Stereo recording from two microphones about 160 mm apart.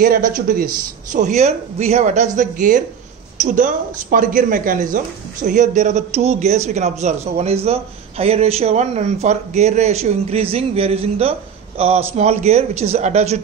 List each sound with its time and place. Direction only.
0.0 s speech: 60° right (ahead or behind)
1.1 s a woman's voice: 45° right (ahead or behind)